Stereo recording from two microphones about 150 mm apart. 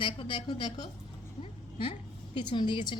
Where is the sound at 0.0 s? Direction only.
35° left (ahead or behind).